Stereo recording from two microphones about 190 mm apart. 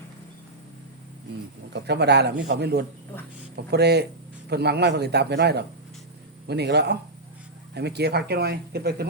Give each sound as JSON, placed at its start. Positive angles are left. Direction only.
{"t": 1.7, "sound": "speech", "side_deg": -60}